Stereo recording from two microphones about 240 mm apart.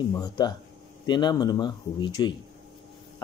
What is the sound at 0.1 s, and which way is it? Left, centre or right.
Speech, centre.